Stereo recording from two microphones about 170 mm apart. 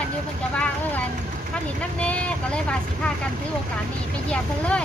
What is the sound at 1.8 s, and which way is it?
Speech, 5° left (ahead or behind).